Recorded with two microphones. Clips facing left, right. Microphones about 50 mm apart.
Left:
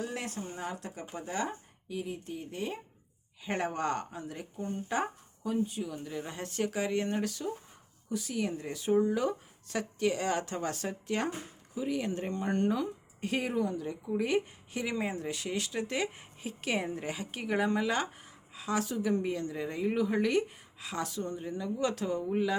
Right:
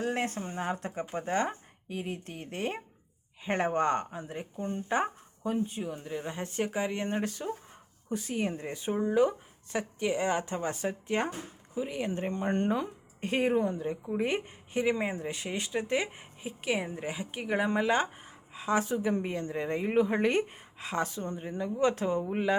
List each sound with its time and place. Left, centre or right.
0.0 s speech: right
3.4 s speech: right
6.0 s speech: centre